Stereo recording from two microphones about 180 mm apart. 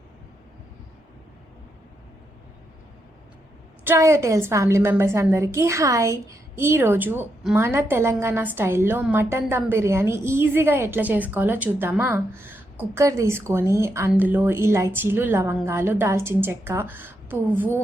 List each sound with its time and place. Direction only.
3.8 s a woman's voice: 15° right (ahead or behind)